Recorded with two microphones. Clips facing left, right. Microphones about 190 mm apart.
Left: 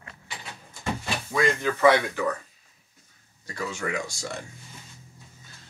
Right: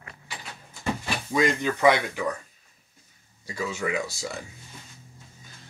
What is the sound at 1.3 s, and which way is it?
Speech, 20° right (ahead or behind).